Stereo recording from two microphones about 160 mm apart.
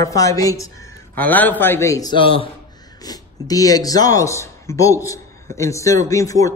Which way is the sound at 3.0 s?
25° left (ahead or behind).